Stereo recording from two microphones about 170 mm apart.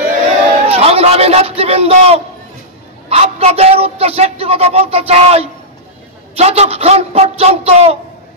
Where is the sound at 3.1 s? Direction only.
35° right (ahead or behind).